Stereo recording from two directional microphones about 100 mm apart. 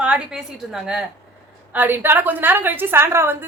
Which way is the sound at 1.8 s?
20° right (ahead or behind).